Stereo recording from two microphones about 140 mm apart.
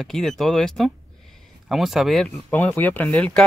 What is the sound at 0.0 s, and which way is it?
Speech, 5° left (ahead or behind).